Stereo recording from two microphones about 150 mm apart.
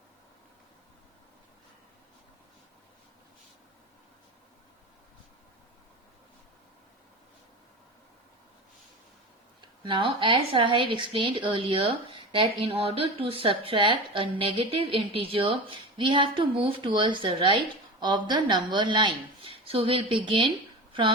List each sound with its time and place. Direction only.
9.6 s a woman's voice: 35° right (ahead or behind)